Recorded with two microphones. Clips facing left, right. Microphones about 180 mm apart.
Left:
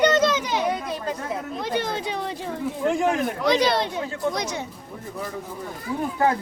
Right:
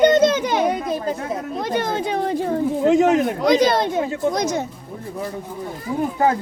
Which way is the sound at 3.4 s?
45° right (ahead or behind).